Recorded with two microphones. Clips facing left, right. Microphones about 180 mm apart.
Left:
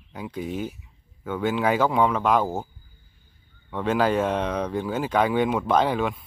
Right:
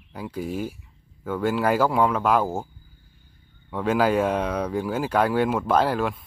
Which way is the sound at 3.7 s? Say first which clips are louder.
Right 1 dB; 10° right (ahead or behind).